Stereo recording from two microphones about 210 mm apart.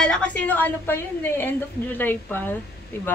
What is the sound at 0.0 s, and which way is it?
Speech, 5° left (ahead or behind).